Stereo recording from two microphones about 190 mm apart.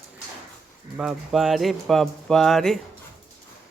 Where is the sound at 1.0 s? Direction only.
Centre (ahead or behind).